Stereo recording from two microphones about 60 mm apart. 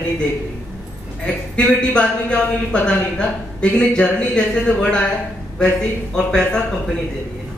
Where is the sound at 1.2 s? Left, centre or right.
Centre.